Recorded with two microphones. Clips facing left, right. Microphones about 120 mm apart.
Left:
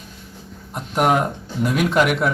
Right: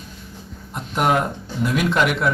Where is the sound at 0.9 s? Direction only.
5° left (ahead or behind).